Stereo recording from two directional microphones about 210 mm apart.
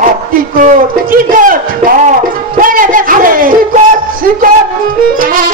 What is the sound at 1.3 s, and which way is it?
Music, 40° right (ahead or behind).